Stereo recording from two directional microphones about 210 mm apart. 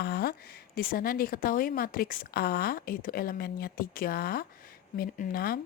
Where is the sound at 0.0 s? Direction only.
50° left (ahead or behind).